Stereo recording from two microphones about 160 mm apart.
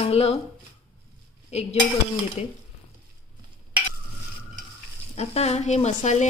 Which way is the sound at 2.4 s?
40° left (ahead or behind).